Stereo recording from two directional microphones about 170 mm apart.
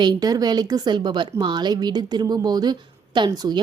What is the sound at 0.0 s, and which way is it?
A woman's voice, 25° right (ahead or behind).